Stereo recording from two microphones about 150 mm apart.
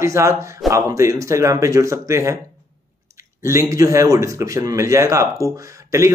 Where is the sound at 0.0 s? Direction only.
20° right (ahead or behind).